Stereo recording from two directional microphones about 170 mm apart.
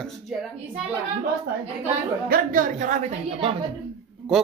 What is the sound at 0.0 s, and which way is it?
Speech, centre (ahead or behind).